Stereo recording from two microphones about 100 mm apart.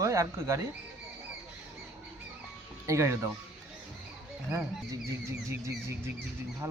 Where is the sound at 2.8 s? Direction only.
30° right (ahead or behind).